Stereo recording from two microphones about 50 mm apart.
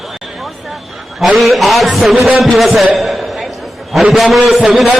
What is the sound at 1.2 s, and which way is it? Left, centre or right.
A man's voice, centre.